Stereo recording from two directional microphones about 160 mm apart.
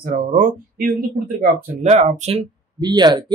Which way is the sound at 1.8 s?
45° right (ahead or behind).